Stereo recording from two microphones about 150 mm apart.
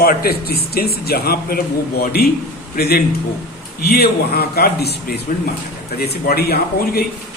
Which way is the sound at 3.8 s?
90° left.